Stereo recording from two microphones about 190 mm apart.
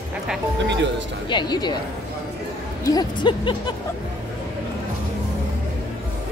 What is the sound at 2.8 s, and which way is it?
Speech, 20° left (ahead or behind).